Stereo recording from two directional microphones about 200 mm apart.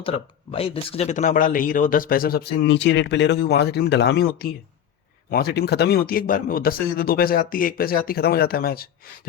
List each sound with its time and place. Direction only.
0.0 s speech: 30° left (ahead or behind); by 8.9 s 50° left (ahead or behind)